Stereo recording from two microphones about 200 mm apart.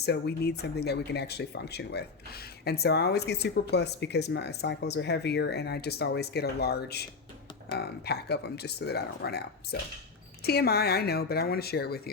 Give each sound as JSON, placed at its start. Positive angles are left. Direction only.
{"t": 0.0, "sound": "speech", "side_deg": 55}
{"t": 10.4, "sound": "speech", "side_deg": 50}